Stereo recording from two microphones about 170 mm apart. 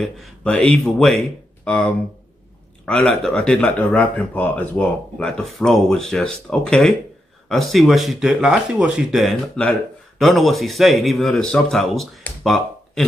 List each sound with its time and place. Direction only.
0.0 s speech: 5° left (ahead or behind)